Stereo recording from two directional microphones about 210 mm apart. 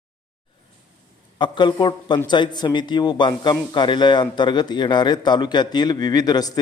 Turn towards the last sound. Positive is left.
turn(degrees=20)  # may be behind; listen again after turning